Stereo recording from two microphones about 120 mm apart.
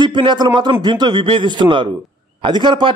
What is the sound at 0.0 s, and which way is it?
A man's voice, 40° right (ahead or behind).